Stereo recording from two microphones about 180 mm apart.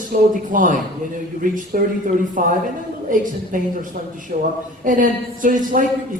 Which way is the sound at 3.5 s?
50° right (ahead or behind).